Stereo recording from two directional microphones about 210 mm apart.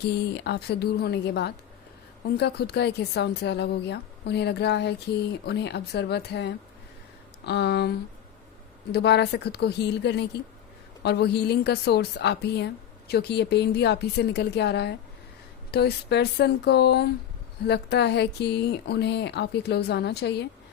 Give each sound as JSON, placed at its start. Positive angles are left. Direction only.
{"t": 0.3, "sound": "a woman's voice", "side_deg": 55}